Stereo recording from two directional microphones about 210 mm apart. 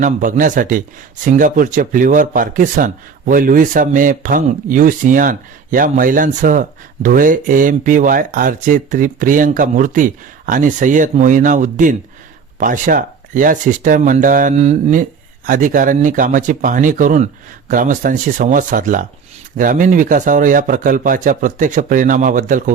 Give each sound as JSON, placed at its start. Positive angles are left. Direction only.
{"t": 0.0, "sound": "speech", "side_deg": -40}